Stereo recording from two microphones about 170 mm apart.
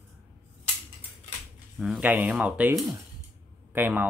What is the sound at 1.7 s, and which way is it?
Speech, 5° right (ahead or behind).